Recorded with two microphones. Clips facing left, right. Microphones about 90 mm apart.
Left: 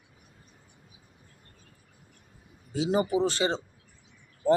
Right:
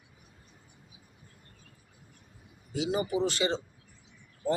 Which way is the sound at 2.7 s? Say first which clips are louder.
Left 4 dB; 35° left (ahead or behind).